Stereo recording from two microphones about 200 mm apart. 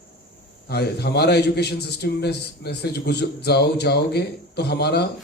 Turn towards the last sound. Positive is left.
turn(degrees=55)  # may be behind; listen again after turning